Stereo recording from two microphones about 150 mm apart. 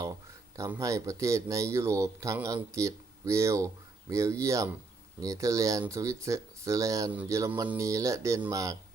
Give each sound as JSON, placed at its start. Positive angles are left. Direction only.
{"t": 0.8, "sound": "speech", "side_deg": -20}